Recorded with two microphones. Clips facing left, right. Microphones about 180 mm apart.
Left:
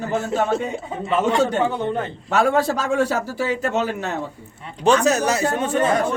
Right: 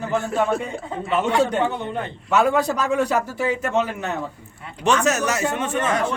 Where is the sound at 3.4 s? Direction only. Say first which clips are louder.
Even; 35° left (ahead or behind).